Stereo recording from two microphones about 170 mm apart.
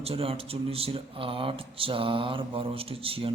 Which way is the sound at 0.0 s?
35° right (ahead or behind).